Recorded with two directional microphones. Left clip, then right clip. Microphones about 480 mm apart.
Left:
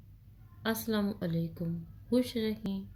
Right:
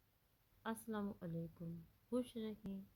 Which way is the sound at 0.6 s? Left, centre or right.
Centre.